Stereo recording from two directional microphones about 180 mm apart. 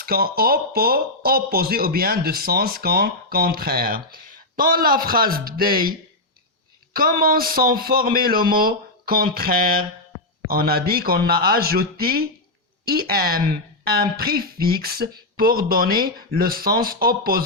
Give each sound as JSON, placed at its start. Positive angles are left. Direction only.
{"t": 0.0, "sound": "speech", "side_deg": -55}
{"t": 6.9, "sound": "speech", "side_deg": -55}